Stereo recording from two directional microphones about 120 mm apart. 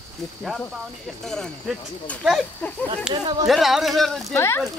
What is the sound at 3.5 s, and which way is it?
Speech, centre (ahead or behind).